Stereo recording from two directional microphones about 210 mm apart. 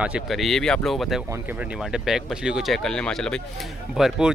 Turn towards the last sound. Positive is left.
turn(degrees=0)  # may be behind; listen again after turning